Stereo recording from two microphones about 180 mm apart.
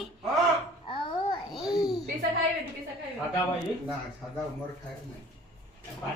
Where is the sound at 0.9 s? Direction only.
25° left (ahead or behind).